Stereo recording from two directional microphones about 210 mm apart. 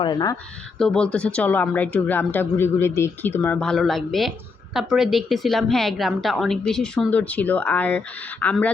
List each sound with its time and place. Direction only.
0.0 s speech: 20° left (ahead or behind)
0.8 s speech: 5° left (ahead or behind)